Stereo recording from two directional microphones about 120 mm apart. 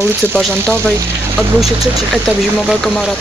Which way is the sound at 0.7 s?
20° right (ahead or behind).